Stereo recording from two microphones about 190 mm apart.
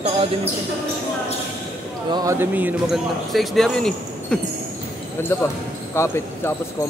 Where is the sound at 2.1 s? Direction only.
15° right (ahead or behind); by 6.5 s 15° left (ahead or behind).